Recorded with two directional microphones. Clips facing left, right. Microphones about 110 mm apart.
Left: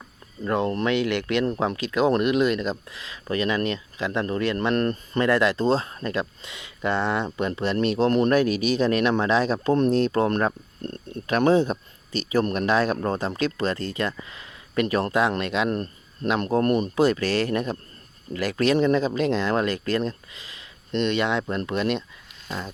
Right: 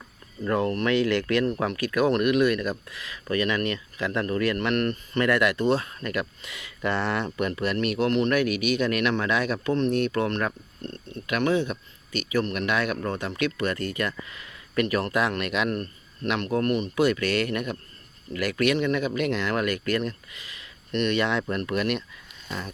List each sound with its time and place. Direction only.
0.4 s speech: 20° left (ahead or behind); by 11.2 s 50° left (ahead or behind)
11.3 s speech: 35° left (ahead or behind); by 22.7 s 20° left (ahead or behind)